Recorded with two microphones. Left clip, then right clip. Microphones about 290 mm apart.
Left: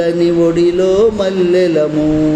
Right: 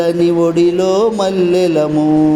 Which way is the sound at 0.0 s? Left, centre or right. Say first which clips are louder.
Left 1 dB; centre.